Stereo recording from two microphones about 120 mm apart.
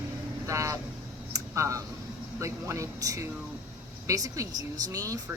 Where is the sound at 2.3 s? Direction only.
25° right (ahead or behind).